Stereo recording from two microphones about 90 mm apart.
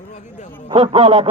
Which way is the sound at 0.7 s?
80° right.